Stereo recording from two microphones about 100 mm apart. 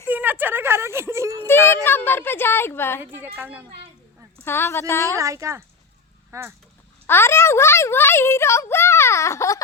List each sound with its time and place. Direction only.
0.1 s a sound: 20° right (ahead or behind)
1.4 s speech: 25° left (ahead or behind)
3.0 s a woman's voice: 20° right (ahead or behind)
4.4 s speech: 25° left (ahead or behind)
5.1 s speech: 30° right (ahead or behind)
7.1 s speech: 25° left (ahead or behind)